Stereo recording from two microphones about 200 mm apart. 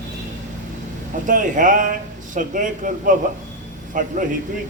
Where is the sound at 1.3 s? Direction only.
40° right (ahead or behind).